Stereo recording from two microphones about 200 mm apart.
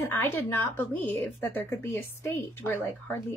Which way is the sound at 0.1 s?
10° left (ahead or behind).